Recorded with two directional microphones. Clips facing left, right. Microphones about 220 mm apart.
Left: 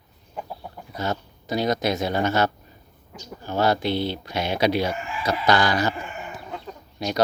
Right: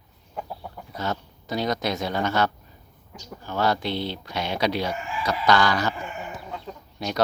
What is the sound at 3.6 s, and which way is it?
Speech, 5° left (ahead or behind).